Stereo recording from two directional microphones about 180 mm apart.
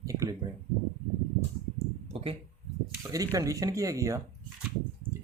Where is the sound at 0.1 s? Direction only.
20° right (ahead or behind).